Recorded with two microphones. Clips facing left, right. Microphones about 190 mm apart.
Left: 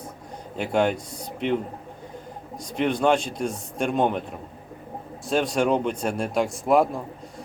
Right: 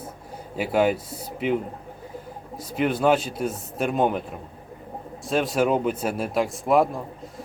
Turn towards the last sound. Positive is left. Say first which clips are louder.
# even
turn(degrees=0)  # may be behind; listen again after turning